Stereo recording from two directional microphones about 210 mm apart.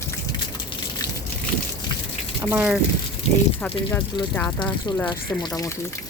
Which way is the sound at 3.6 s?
5° left (ahead or behind).